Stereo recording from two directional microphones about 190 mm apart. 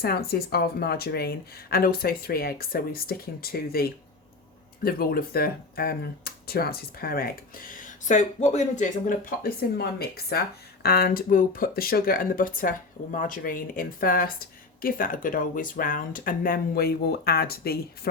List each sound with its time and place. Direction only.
0.0 s speech: 55° left (ahead or behind)